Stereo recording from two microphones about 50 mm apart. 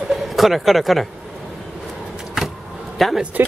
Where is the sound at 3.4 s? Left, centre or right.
Right.